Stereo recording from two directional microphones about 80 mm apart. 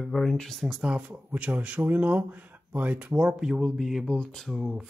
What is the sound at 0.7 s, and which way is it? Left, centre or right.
Speech, centre.